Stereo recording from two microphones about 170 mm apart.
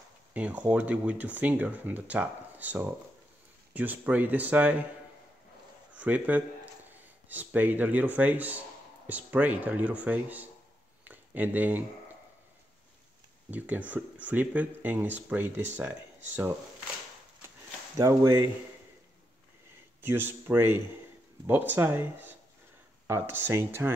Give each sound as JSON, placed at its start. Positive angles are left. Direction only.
{"t": 0.3, "sound": "speech", "side_deg": -10}
{"t": 5.9, "sound": "a man's voice", "side_deg": -10}
{"t": 11.1, "sound": "a sound", "side_deg": -10}
{"t": 13.5, "sound": "speech", "side_deg": -10}
{"t": 17.9, "sound": "speech", "side_deg": -20}
{"t": 20.0, "sound": "speech", "side_deg": -15}